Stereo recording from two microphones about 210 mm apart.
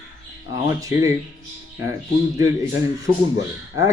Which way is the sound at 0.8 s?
15° right (ahead or behind).